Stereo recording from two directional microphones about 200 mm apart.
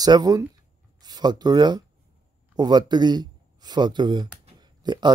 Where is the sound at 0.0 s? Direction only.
20° right (ahead or behind).